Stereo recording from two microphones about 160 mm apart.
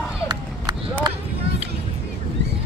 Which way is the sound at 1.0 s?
25° right (ahead or behind).